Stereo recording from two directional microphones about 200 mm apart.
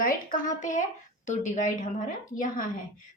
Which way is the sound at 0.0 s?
40° left (ahead or behind).